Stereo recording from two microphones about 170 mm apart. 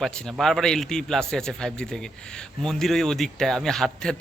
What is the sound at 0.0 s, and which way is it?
Speech, centre (ahead or behind).